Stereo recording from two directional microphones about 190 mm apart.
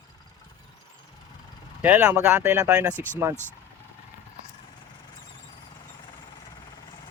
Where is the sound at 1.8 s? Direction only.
10° right (ahead or behind).